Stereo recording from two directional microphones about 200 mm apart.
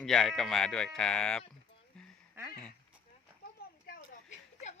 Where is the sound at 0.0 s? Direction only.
5° left (ahead or behind).